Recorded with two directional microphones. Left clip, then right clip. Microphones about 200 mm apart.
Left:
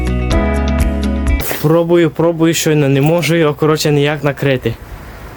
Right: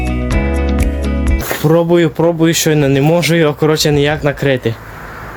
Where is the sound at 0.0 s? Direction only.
Centre (ahead or behind).